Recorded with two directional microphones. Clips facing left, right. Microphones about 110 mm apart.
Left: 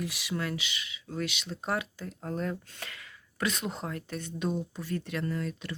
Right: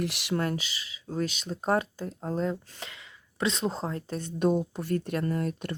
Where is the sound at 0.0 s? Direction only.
70° right (ahead or behind).